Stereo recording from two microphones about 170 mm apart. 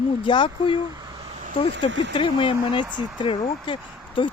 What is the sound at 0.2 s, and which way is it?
Speech, 30° left (ahead or behind).